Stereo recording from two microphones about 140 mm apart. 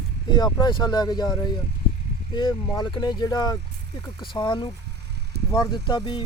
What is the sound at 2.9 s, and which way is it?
Speech, 30° left (ahead or behind).